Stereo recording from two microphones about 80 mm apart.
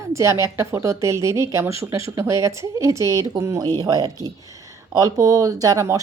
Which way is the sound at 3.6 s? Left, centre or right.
Right.